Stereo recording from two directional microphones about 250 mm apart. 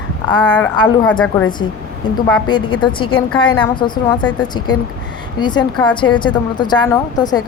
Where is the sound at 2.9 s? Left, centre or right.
Centre.